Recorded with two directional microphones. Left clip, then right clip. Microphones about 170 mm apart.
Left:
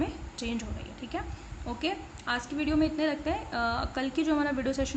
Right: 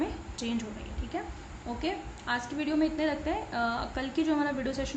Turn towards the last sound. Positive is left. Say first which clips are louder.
# left 2 dB
turn(degrees=20)  # may be behind; listen again after turning